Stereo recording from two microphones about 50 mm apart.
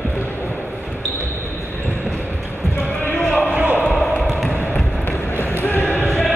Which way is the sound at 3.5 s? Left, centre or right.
Right.